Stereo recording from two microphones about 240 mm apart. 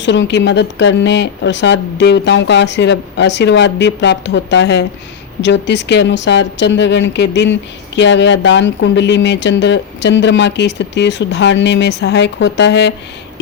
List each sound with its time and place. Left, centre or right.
0.0 s speech: left